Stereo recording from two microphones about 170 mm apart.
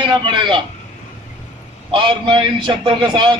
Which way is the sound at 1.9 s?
30° right (ahead or behind).